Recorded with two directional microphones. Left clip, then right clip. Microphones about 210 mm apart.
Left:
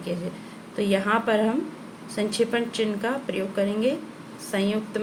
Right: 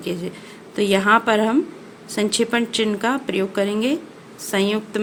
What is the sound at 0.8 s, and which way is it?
Speech, 55° right (ahead or behind).